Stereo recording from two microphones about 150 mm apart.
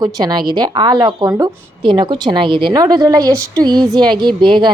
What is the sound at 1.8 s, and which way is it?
A woman's voice, 35° right (ahead or behind).